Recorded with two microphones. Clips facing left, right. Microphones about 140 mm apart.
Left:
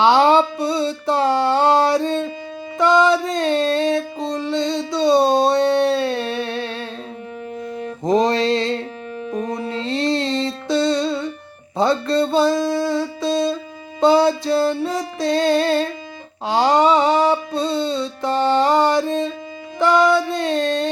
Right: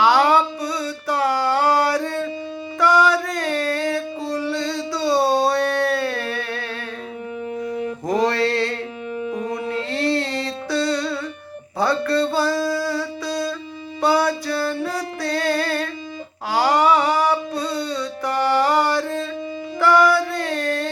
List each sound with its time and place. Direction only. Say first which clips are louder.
0.0 s music: left 3 dB; 25° left (ahead or behind)
2.7 s a sound: left 2 dB; 20° left (ahead or behind)
8.0 s mantra: left 4 dB; 20° left (ahead or behind)
9.3 s music: left 3 dB; 20° left (ahead or behind)
11.8 s a sound: left 2 dB; 20° left (ahead or behind)
14.0 s music: left 5 dB; 25° left (ahead or behind)